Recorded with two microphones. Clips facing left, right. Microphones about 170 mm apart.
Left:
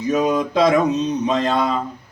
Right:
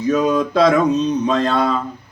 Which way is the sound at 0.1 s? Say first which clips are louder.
Right 2 dB; 15° left (ahead or behind).